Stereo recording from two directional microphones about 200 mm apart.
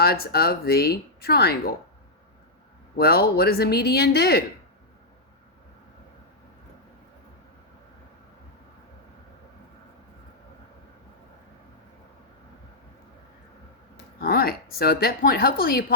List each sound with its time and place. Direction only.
0.0 s speech: 50° left (ahead or behind)
3.0 s speech: 50° left (ahead or behind)
13.9 s speech: 50° left (ahead or behind)